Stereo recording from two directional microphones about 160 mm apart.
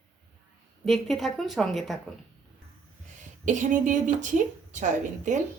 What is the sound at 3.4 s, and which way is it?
Speech, 50° right (ahead or behind).